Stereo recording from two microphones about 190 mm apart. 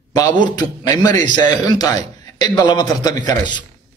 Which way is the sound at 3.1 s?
40° right (ahead or behind).